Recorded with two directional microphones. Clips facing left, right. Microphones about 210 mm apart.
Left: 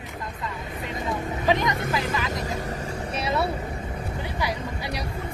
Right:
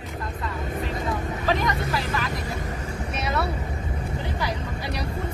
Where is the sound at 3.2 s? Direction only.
30° left (ahead or behind).